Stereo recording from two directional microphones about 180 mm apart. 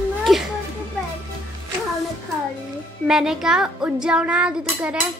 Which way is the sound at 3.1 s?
5° right (ahead or behind).